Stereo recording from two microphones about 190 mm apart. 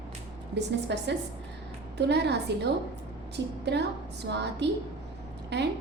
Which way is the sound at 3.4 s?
70° right (ahead or behind).